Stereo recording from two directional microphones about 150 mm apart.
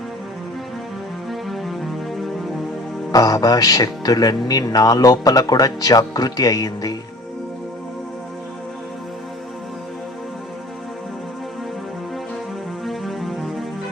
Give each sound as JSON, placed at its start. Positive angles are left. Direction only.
{"t": 1.3, "sound": "music", "side_deg": 0}
{"t": 3.1, "sound": "speech", "side_deg": 25}
{"t": 12.8, "sound": "music", "side_deg": 0}